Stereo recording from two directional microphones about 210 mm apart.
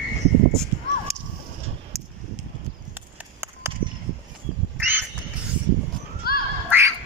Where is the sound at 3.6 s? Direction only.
10° right (ahead or behind).